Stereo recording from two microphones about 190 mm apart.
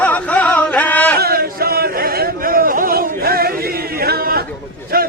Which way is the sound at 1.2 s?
50° right (ahead or behind).